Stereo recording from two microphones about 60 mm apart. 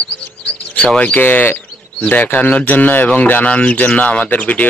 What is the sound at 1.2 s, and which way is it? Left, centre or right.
Speech, left.